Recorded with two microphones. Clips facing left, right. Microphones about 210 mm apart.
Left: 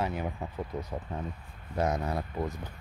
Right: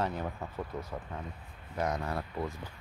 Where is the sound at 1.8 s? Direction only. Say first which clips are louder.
Left 3 dB; 25° left (ahead or behind).